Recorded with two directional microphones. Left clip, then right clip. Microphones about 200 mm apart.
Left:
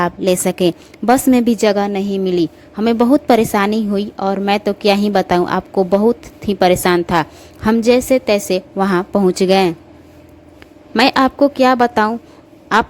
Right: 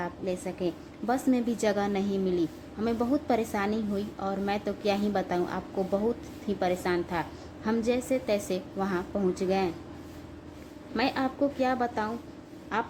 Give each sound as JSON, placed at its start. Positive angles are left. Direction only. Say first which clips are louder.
{"t": 0.0, "sound": "a woman's voice", "louder": "left 18 dB", "side_deg": 55}
{"t": 10.9, "sound": "a woman's voice", "louder": "left 16 dB", "side_deg": 55}